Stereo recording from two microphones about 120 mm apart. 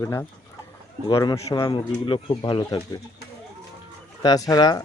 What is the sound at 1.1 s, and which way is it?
Speech, 35° left (ahead or behind).